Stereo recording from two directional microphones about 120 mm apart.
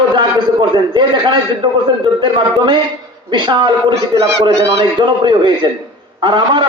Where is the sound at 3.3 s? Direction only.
40° right (ahead or behind).